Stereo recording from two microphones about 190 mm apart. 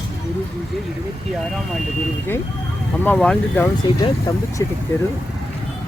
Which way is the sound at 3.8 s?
20° left (ahead or behind).